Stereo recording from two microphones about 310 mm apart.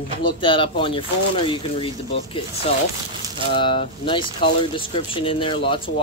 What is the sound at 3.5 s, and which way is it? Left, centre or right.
Speech, centre.